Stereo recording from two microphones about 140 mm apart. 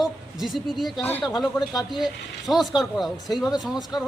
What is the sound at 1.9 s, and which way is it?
A woman's voice, centre (ahead or behind).